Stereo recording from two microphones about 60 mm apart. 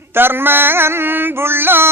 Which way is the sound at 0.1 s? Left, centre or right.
Right.